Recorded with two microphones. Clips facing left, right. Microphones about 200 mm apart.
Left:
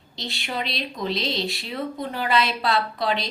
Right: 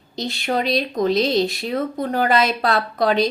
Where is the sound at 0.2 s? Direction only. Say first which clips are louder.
Right 8 dB; 45° right (ahead or behind).